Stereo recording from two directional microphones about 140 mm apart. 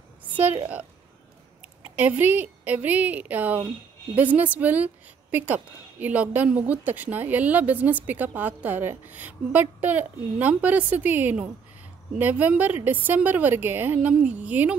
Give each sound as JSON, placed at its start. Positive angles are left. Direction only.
{"t": 0.2, "sound": "a woman's voice", "side_deg": -10}
{"t": 2.0, "sound": "a woman's voice", "side_deg": -10}